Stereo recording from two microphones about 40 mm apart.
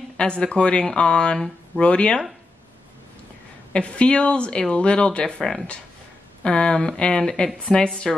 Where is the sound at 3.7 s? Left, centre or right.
Left.